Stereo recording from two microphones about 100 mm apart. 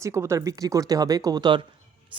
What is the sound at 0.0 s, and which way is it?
Speech, 30° right (ahead or behind).